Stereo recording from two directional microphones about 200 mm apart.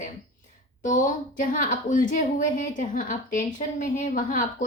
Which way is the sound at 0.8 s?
40° left (ahead or behind).